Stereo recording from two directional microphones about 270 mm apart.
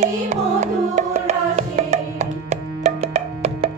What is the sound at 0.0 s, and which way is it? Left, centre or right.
Music, right.